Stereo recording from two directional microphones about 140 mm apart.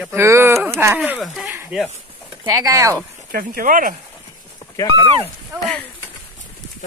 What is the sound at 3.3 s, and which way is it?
Speech, 90° right.